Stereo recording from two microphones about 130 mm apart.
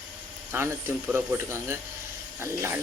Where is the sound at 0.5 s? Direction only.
20° right (ahead or behind).